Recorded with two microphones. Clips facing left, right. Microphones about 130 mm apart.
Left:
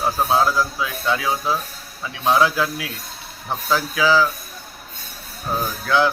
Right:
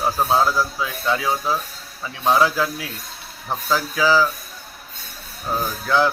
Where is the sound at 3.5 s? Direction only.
Centre (ahead or behind).